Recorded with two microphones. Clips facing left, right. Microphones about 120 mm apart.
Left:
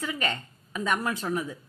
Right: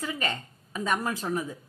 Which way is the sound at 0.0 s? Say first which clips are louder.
Left 1 dB; 35° right (ahead or behind).